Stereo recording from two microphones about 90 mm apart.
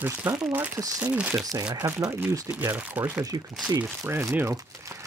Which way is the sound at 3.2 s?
40° right (ahead or behind).